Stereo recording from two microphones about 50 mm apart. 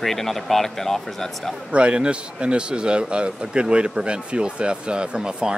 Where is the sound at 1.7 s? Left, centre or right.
Right.